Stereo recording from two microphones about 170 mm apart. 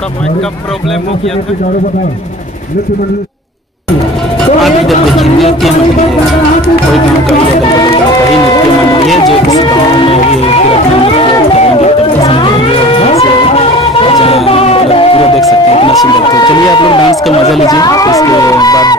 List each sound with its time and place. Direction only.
4.6 s a sound: centre (ahead or behind)
9.9 s music: 35° left (ahead or behind)
16.3 s speech: 25° left (ahead or behind)